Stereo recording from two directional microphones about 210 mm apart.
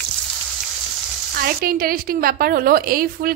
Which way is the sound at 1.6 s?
45° right (ahead or behind).